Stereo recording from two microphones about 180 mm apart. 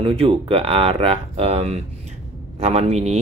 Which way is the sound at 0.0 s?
30° right (ahead or behind).